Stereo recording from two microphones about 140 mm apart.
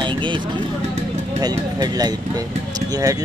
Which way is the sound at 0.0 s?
35° right (ahead or behind).